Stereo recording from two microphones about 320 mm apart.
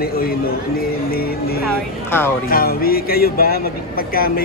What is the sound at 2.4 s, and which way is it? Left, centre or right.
A man's voice, left.